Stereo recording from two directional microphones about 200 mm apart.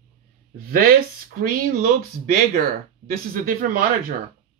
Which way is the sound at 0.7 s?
45° right (ahead or behind).